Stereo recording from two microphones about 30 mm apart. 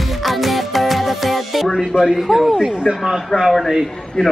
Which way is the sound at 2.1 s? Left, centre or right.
Centre.